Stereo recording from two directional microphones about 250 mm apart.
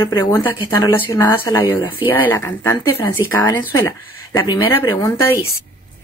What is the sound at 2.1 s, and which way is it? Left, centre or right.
Speech, centre.